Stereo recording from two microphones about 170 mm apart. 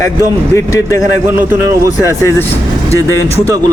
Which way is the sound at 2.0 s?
15° left (ahead or behind).